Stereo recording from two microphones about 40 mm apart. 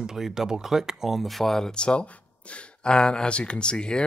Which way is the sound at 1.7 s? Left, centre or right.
Left.